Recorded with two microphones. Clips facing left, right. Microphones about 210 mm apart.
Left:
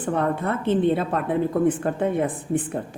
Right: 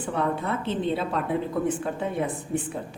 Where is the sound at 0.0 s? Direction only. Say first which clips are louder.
Left 3 dB; 50° left (ahead or behind).